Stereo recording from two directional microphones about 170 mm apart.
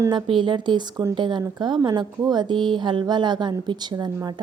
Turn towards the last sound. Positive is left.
turn(degrees=-25)  # may be behind; listen again after turning